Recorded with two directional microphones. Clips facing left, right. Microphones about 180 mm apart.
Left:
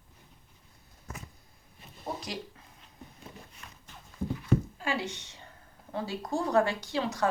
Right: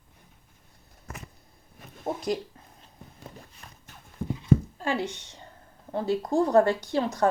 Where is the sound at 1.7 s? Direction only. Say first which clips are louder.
Right 6 dB; 50° right (ahead or behind).